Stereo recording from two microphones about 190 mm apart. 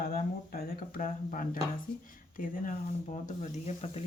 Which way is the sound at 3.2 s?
40° left (ahead or behind).